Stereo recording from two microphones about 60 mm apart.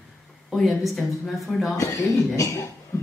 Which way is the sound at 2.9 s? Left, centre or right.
Left.